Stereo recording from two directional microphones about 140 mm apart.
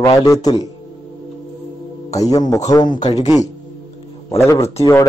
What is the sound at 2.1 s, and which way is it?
Speech, 25° left (ahead or behind).